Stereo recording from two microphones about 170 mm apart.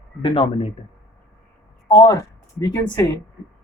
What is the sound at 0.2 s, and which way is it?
Speech, 30° left (ahead or behind).